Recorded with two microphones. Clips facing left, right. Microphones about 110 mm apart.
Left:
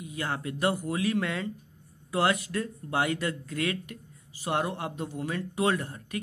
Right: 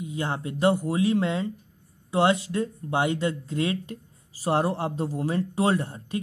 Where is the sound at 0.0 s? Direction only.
25° right (ahead or behind).